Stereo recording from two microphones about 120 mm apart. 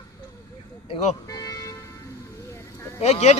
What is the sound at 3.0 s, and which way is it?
Speech, 65° left (ahead or behind).